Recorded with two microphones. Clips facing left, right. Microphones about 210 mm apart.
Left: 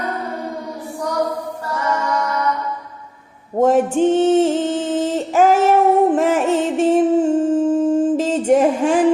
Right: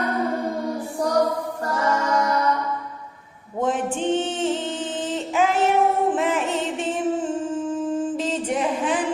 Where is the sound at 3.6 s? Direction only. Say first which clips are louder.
Left 9 dB; 45° left (ahead or behind).